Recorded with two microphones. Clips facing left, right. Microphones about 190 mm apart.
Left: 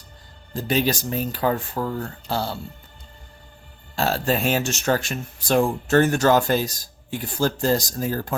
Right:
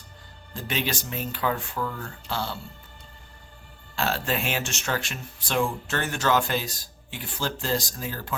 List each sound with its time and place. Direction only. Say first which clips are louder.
0.5 s speech: left 8 dB; 40° left (ahead or behind)
3.9 s speech: left 5 dB; 35° left (ahead or behind)